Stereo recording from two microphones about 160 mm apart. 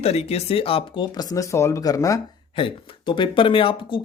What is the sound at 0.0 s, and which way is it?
Speech, 40° left (ahead or behind).